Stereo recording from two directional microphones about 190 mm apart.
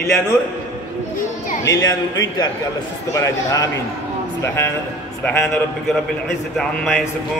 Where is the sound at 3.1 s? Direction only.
15° left (ahead or behind).